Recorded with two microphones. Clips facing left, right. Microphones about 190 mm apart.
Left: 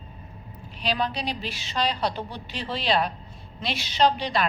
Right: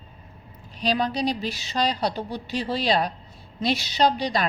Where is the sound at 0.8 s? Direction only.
40° right (ahead or behind).